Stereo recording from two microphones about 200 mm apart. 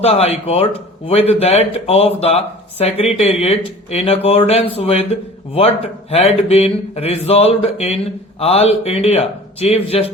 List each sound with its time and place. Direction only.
0.0 s speech: 30° left (ahead or behind)